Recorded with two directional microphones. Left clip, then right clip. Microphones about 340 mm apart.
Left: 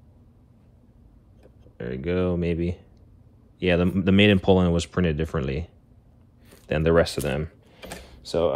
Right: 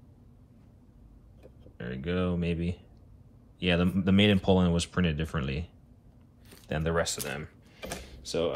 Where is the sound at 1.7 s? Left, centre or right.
Left.